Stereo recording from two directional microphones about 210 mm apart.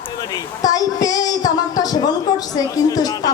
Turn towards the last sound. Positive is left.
turn(degrees=15)  # may be behind; listen again after turning